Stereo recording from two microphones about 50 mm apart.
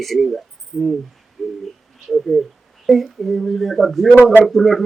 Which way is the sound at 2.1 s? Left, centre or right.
Centre.